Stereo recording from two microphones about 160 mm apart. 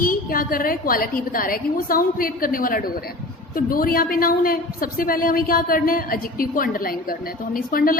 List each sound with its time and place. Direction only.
0.0 s a woman's voice: 65° left (ahead or behind)